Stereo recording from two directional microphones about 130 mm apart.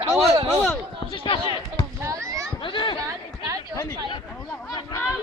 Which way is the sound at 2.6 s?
35° left (ahead or behind).